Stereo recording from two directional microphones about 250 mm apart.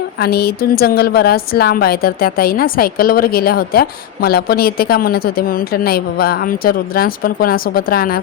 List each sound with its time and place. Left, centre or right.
0.2 s a woman's voice: left